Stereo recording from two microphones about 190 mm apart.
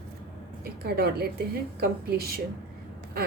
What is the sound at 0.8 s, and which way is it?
A woman's voice, 55° right (ahead or behind).